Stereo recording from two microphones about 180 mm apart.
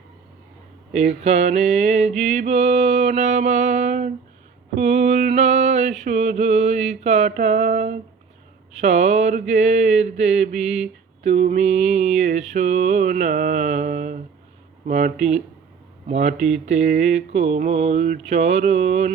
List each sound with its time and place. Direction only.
1.2 s mantra: 35° right (ahead or behind)